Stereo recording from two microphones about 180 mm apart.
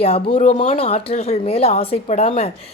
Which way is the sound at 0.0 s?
35° left (ahead or behind).